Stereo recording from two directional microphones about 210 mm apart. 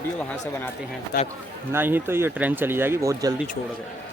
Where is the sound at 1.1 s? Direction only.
45° left (ahead or behind).